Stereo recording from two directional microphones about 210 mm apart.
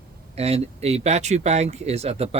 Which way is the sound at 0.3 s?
30° right (ahead or behind).